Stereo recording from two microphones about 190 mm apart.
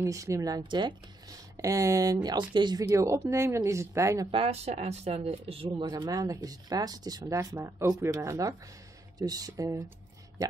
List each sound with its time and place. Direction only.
0.0 s speech: 15° right (ahead or behind)
4.3 s speech: 30° right (ahead or behind)